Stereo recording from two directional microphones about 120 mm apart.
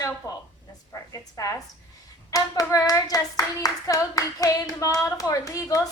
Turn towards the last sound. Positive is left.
turn(degrees=30)  # may be behind; listen again after turning